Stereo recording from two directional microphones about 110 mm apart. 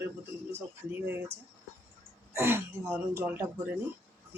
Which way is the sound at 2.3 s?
25° right (ahead or behind).